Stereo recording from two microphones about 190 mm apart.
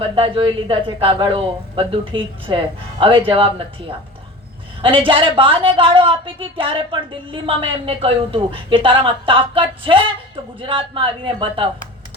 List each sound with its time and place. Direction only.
0.0 s a woman's voice: 25° right (ahead or behind)